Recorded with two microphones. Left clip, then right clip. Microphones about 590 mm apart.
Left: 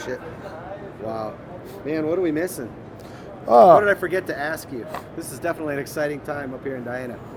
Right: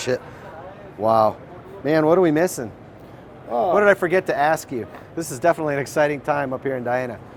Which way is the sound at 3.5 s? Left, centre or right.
Left.